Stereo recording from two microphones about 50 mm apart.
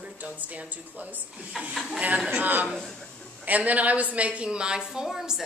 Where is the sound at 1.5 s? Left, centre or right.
Centre.